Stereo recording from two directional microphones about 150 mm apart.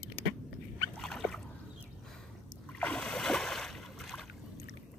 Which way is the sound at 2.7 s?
5° left (ahead or behind).